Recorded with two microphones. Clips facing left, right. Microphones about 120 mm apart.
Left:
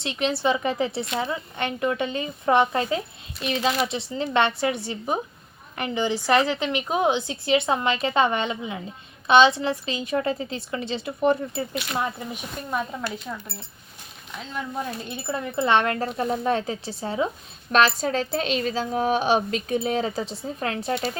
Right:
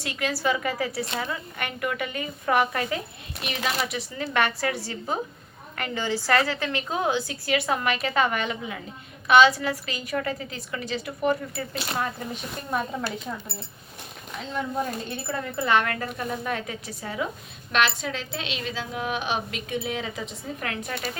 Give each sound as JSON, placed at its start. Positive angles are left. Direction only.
{"t": 0.0, "sound": "a woman's voice", "side_deg": 25}
{"t": 11.7, "sound": "speech", "side_deg": -35}
{"t": 11.9, "sound": "speech", "side_deg": 15}
{"t": 15.1, "sound": "a woman's voice", "side_deg": 20}
{"t": 17.7, "sound": "a woman's voice", "side_deg": 40}